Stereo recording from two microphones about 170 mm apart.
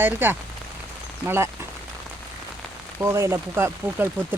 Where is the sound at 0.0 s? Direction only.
10° right (ahead or behind).